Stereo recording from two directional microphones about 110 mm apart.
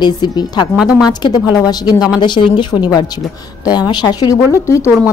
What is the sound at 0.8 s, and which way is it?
Speech, 5° right (ahead or behind).